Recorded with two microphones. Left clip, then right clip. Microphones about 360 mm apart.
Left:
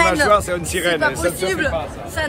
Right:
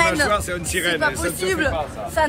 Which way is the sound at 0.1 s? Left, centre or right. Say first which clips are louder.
Left 5 dB; centre.